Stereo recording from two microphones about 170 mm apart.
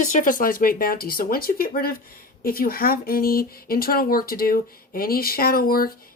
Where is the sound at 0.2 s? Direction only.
50° left (ahead or behind).